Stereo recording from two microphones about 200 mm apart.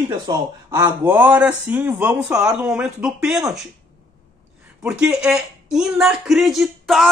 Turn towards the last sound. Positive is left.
turn(degrees=0)  # may be behind; listen again after turning